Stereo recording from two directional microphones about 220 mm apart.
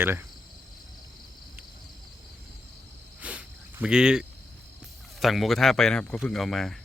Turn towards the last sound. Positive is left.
turn(degrees=0)  # may be behind; listen again after turning